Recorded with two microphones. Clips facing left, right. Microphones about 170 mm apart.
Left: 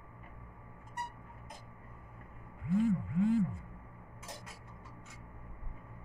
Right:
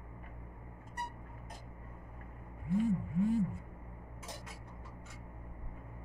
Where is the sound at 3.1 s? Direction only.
90° left.